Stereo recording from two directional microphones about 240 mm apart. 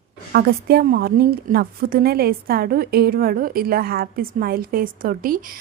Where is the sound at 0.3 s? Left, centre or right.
Right.